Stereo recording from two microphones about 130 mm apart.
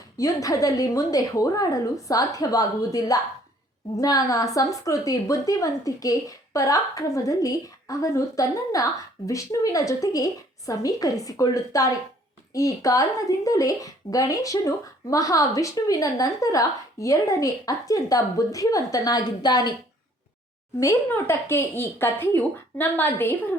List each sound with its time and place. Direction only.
0.2 s speech: 25° left (ahead or behind)
20.7 s speech: 20° left (ahead or behind)